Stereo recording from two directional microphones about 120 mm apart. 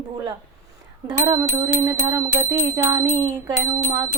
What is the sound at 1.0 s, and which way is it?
Speech, 30° right (ahead or behind).